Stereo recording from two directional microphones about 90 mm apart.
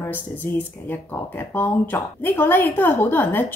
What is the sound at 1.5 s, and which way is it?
A woman's voice, 25° left (ahead or behind).